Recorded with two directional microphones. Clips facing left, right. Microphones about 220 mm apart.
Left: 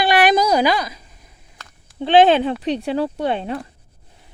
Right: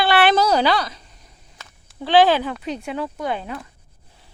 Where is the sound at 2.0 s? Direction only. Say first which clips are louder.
Left 3 dB; 25° left (ahead or behind).